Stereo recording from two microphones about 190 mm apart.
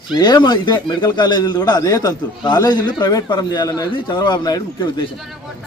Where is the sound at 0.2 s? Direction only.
20° left (ahead or behind).